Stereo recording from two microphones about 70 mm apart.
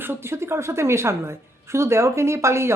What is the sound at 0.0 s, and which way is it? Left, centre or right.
Speech, right.